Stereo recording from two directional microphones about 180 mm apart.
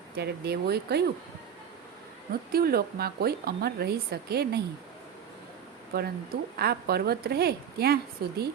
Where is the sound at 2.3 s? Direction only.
55° right (ahead or behind).